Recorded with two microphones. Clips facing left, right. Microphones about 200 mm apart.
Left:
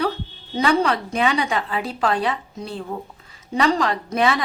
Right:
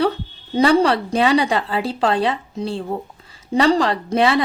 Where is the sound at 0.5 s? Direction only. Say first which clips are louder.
Right 5 dB; 30° right (ahead or behind).